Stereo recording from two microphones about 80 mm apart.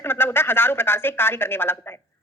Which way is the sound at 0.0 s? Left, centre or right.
Left.